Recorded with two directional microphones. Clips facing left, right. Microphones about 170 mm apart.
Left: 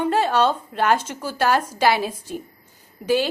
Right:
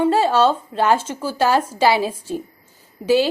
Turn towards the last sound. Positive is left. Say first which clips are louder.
# right 4 dB
turn(degrees=-10)  # may be behind; listen again after turning